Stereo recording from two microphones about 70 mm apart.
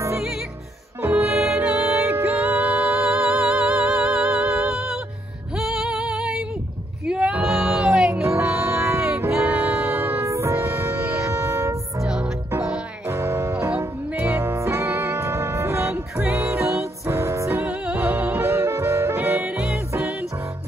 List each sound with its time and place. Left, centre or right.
1.0 s music: right
3.3 s music: centre
5.6 s female singing: centre
7.1 s music: centre
8.3 s music: right
10.2 s music: right
12.0 s music: centre
12.4 s music: right